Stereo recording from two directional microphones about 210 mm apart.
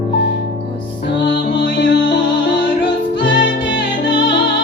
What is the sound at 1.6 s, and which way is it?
Music, 55° left (ahead or behind).